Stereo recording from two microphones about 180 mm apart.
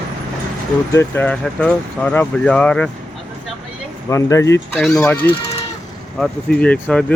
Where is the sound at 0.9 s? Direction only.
10° left (ahead or behind).